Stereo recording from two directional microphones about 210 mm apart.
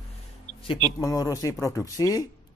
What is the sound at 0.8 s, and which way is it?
Speech, 15° left (ahead or behind).